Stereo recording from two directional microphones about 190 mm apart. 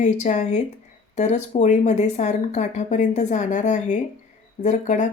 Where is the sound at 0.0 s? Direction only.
40° left (ahead or behind).